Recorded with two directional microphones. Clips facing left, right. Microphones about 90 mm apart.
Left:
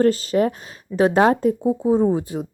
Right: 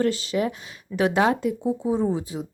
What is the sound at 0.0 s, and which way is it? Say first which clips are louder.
Speech: left 6 dB; 40° left (ahead or behind).